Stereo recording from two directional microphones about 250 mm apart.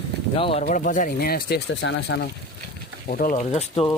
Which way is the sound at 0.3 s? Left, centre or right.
Left.